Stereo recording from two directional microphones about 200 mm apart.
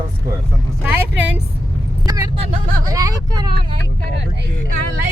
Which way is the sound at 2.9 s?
15° right (ahead or behind).